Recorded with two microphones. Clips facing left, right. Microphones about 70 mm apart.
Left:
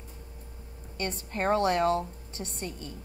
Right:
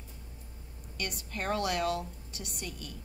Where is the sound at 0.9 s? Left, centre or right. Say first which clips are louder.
Left 5 dB; left.